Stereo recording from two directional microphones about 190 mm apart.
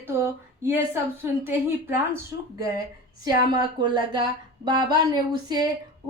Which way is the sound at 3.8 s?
25° right (ahead or behind).